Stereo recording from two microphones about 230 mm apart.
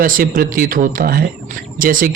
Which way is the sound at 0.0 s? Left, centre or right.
Right.